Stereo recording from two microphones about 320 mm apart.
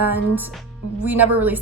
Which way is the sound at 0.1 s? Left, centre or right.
Centre.